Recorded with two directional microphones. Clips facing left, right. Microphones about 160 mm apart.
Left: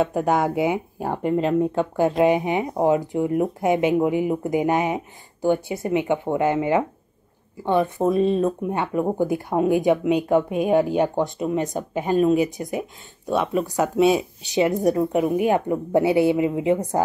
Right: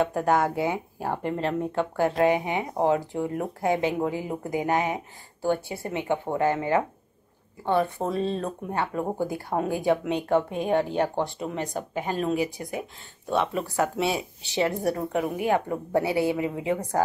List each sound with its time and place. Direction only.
0.1 s speech: 15° left (ahead or behind)